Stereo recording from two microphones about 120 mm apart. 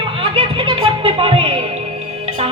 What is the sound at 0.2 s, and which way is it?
Music, 50° right (ahead or behind).